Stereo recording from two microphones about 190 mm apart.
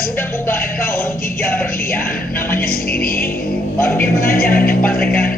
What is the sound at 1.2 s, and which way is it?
Speech, 50° left (ahead or behind).